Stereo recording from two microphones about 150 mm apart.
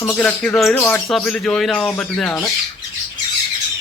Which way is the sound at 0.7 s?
15° left (ahead or behind).